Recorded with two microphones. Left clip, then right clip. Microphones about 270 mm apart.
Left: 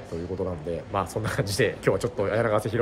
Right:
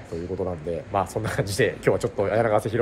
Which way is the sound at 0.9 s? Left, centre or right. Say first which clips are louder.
Right 3 dB; centre.